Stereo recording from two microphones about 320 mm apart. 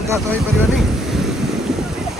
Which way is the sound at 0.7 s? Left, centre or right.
Centre.